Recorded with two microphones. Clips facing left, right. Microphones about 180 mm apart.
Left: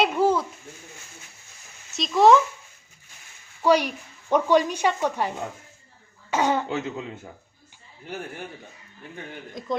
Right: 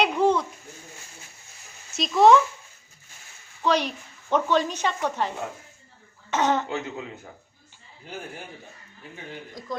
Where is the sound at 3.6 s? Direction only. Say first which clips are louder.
Left 4 dB; 10° left (ahead or behind).